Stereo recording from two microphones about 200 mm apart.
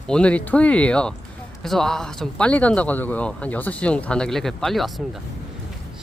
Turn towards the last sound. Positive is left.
turn(degrees=0)  # may be behind; listen again after turning